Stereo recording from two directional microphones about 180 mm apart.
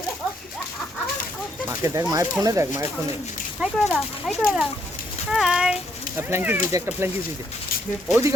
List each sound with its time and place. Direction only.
1.6 s speech: 15° right (ahead or behind)
3.6 s speech: centre (ahead or behind)
8.1 s speech: 40° left (ahead or behind)